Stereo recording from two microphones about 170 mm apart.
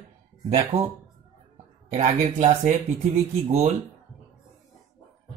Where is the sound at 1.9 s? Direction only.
40° right (ahead or behind).